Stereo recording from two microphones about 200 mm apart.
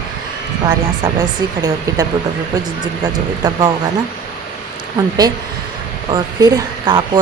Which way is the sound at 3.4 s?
20° right (ahead or behind).